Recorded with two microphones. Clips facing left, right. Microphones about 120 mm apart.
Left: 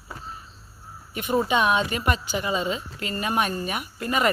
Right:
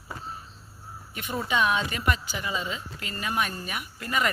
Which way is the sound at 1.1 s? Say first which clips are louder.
Left 6 dB; 20° left (ahead or behind).